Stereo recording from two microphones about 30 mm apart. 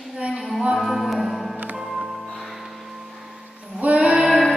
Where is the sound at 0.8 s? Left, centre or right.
Centre.